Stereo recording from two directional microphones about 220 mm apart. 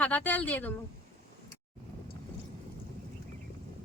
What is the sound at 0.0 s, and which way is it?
Speech, 5° left (ahead or behind).